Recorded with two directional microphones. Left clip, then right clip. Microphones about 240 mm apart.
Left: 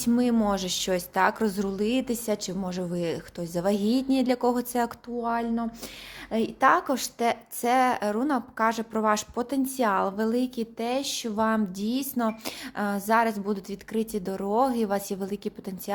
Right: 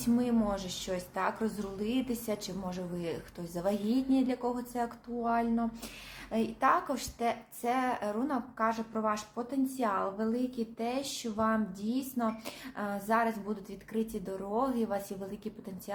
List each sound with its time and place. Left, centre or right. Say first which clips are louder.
0.0 s speech: left 6 dB; left